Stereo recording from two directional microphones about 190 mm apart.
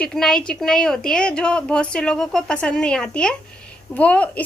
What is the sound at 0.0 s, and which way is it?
A woman's voice, 5° left (ahead or behind).